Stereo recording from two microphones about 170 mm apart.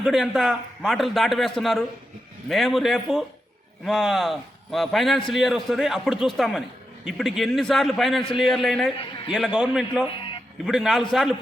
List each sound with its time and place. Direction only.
0.0 s a man's voice: centre (ahead or behind)
9.0 s a man's voice: 30° left (ahead or behind)
9.3 s a man's voice: 5° right (ahead or behind)